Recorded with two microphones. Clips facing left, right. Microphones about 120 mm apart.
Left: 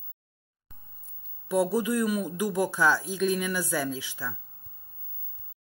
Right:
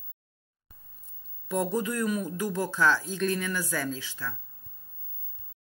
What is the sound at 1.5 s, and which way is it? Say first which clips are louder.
Speech: left 3 dB; 10° left (ahead or behind).